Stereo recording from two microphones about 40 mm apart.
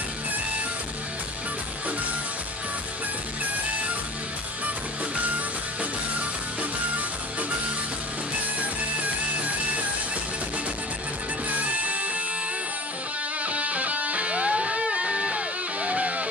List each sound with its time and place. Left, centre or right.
11.6 s music: right
13.4 s music: right